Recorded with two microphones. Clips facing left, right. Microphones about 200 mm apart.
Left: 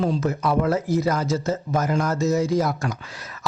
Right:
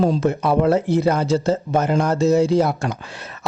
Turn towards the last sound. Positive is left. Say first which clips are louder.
# right 3 dB
turn(degrees=-30)  # may be behind; listen again after turning